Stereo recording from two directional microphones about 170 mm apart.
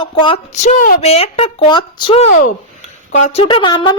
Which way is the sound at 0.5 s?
45° left (ahead or behind).